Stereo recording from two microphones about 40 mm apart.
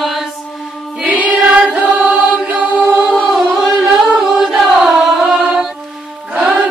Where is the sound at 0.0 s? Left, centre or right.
Centre.